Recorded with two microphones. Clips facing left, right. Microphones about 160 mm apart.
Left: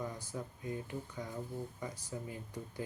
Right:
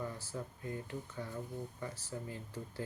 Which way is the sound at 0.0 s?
15° left (ahead or behind).